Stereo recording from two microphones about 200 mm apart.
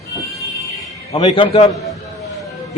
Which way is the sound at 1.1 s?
30° left (ahead or behind).